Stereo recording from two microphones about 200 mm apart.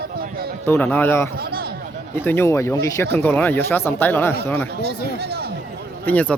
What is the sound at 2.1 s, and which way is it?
Speech, 10° left (ahead or behind).